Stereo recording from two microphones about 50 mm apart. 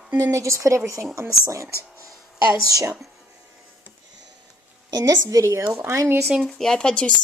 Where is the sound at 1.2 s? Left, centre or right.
Right.